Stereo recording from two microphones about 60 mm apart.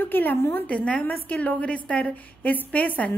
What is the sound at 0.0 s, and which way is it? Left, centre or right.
Speech, left.